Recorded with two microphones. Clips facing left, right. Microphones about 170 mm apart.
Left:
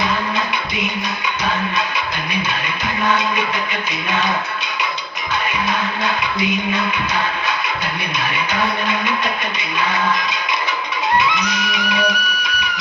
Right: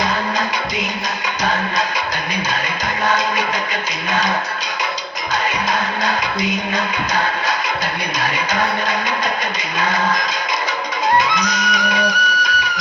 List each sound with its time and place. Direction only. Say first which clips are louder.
6.7 s music: even; 40° right (ahead or behind)
8.2 s vehicle: right 1 dB; 40° right (ahead or behind)
9.7 s a sound: even; 45° right (ahead or behind)
11.2 s music: right 1 dB; 40° right (ahead or behind)